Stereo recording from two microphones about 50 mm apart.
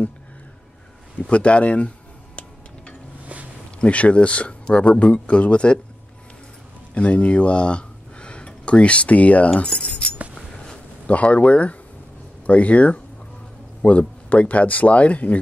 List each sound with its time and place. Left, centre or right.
1.2 s speech: left
3.8 s speech: left
6.9 s speech: left
9.6 s keys jangling: left
11.1 s speech: left